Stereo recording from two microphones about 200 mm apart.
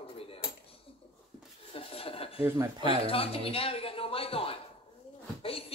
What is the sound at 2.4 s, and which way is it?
Speech, 10° right (ahead or behind).